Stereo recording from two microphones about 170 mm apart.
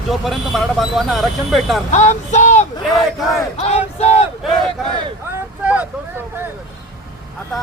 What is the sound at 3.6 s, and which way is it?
Battle cry, 40° left (ahead or behind).